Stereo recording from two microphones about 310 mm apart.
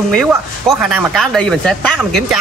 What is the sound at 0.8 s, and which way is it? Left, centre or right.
Speech, centre.